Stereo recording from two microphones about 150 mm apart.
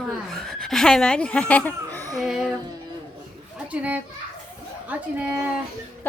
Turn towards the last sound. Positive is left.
turn(degrees=-10)  # may be behind; listen again after turning